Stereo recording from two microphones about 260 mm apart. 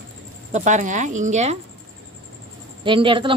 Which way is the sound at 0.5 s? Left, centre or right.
Right.